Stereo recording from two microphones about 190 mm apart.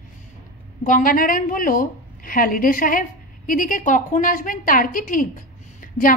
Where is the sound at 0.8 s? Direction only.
45° left (ahead or behind).